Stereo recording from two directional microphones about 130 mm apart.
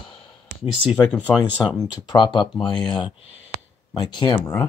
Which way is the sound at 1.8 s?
35° left (ahead or behind).